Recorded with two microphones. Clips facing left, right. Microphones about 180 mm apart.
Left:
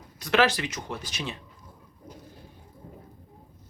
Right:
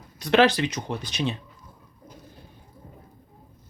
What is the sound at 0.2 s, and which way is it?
Speech, 20° right (ahead or behind).